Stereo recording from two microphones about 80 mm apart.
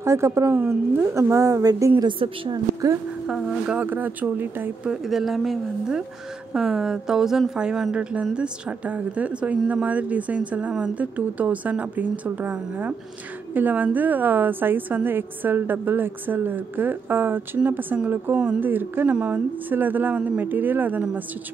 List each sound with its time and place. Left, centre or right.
0.0 s a woman's voice: right
2.0 s a woman's voice: right
3.3 s a woman's voice: centre
3.7 s a woman's voice: right
4.8 s a woman's voice: centre; by 21.0 s right